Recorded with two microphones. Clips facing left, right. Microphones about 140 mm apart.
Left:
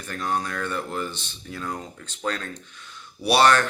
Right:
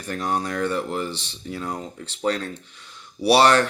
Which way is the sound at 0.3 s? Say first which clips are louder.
Right 5 dB; 35° right (ahead or behind).